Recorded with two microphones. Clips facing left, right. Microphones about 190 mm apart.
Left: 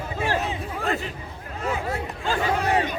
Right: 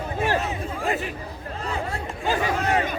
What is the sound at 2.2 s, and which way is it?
Crowd, 15° right (ahead or behind).